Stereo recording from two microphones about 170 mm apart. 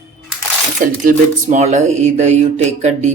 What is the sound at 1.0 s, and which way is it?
Speech, 45° right (ahead or behind).